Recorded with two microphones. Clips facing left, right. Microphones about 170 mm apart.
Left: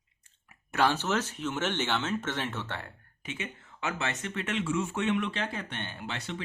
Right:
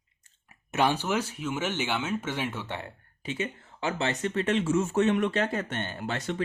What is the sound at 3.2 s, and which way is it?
Speech, 35° right (ahead or behind).